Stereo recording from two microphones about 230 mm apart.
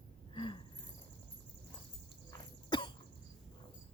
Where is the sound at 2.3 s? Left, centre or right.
Left.